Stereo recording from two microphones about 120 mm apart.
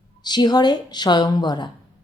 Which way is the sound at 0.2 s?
35° left (ahead or behind).